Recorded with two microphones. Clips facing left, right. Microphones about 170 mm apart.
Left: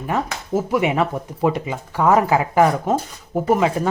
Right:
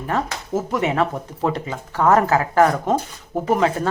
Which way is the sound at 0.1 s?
10° left (ahead or behind).